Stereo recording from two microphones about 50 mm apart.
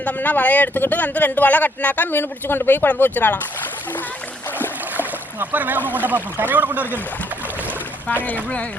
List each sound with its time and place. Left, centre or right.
0.0 s speech: left
5.4 s speech: right
8.1 s speech: left